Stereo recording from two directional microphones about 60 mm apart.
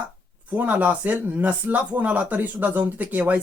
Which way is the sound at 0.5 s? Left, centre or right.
Right.